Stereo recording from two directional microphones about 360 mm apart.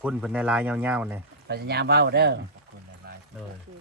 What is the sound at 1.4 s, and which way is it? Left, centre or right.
Speech, right.